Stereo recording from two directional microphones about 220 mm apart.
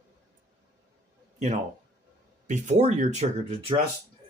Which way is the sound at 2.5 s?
30° right (ahead or behind).